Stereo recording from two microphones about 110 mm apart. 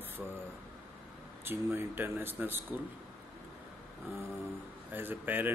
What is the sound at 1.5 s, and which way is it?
Speech, 20° right (ahead or behind).